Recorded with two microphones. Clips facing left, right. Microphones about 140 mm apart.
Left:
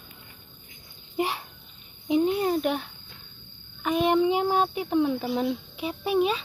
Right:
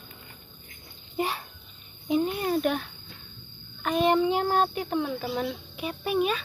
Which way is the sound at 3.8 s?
5° left (ahead or behind).